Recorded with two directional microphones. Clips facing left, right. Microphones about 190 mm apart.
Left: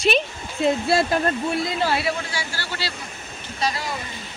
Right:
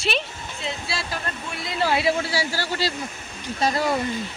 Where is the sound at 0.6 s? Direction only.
50° left (ahead or behind).